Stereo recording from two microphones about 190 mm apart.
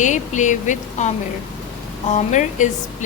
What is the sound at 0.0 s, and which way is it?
Speech, 40° left (ahead or behind).